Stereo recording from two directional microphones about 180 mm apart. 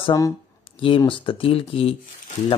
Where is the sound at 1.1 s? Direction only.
30° left (ahead or behind).